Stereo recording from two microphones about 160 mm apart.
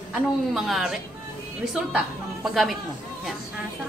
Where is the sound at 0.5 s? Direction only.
Centre (ahead or behind).